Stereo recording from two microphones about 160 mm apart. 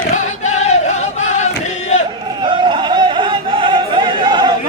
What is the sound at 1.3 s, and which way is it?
Chant, 50° left (ahead or behind).